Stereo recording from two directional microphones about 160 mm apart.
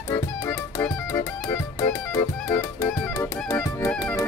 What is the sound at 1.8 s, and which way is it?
Music, 20° left (ahead or behind).